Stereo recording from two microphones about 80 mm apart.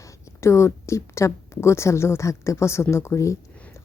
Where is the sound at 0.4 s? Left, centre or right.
Left.